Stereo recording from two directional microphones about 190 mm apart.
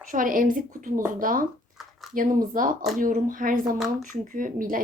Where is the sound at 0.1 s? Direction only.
45° right (ahead or behind).